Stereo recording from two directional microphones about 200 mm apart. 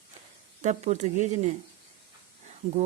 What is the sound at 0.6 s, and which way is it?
Speech, 35° right (ahead or behind).